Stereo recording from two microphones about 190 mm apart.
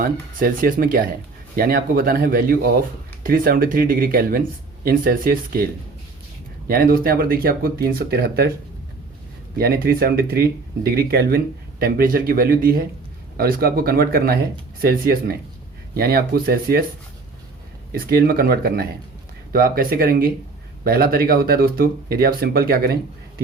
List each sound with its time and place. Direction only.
0.0 s speech: 50° right (ahead or behind)
6.7 s speech: 50° right (ahead or behind)
9.6 s speech: 55° right (ahead or behind)
17.9 s speech: 50° right (ahead or behind)